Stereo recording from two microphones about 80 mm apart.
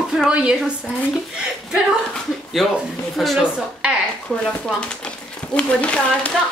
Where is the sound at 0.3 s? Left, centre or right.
Centre.